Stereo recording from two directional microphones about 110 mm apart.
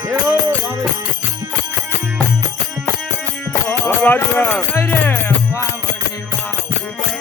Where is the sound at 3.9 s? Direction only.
20° left (ahead or behind).